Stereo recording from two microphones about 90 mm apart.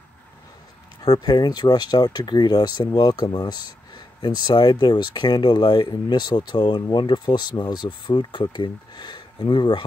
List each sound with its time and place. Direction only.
1.0 s speech: 50° left (ahead or behind)